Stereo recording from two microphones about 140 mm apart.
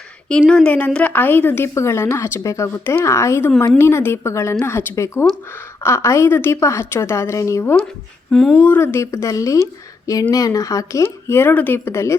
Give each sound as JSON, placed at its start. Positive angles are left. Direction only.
{"t": 0.3, "sound": "a woman's voice", "side_deg": 5}
{"t": 8.3, "sound": "speech", "side_deg": 5}
{"t": 8.6, "sound": "a woman's voice", "side_deg": 15}